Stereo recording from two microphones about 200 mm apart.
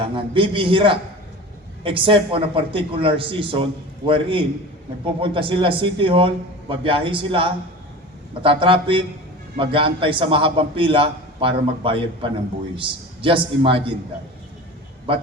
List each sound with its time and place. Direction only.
0.0 s a man's voice: 25° right (ahead or behind)